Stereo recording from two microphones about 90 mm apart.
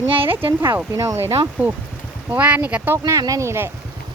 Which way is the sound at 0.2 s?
80° right.